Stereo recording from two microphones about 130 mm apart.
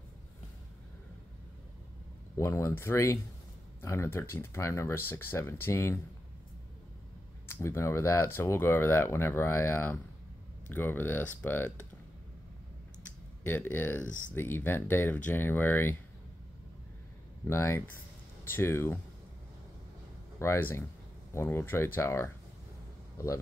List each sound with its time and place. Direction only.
2.3 s speech: 20° left (ahead or behind)
7.4 s speech: 20° left (ahead or behind)
13.5 s speech: 15° left (ahead or behind)
14.0 s speech: 75° left (ahead or behind)
14.3 s speech: 15° left (ahead or behind)
17.5 s speech: 20° left (ahead or behind)
20.3 s speech: 20° left (ahead or behind)